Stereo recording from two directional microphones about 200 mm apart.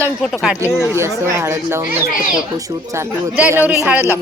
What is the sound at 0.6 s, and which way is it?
Speech, 10° left (ahead or behind).